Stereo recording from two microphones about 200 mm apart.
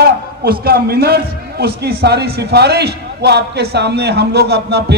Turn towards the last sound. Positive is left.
turn(degrees=-55)  # may be behind; listen again after turning